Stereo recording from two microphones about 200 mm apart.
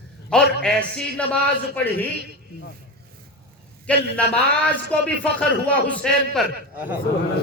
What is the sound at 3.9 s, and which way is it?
A man's voice, 5° left (ahead or behind).